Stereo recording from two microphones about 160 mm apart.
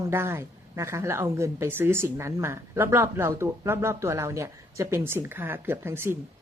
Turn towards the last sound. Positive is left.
turn(degrees=-15)  # may be behind; listen again after turning